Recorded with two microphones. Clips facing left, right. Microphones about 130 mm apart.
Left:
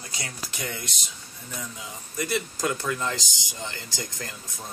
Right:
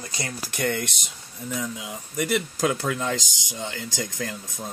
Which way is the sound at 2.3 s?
90° right.